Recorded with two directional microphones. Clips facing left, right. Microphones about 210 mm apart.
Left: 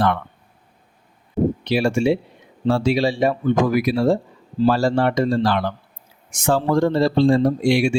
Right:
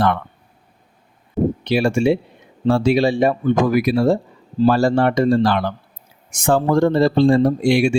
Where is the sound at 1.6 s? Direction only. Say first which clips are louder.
Right 3 dB; 55° right (ahead or behind).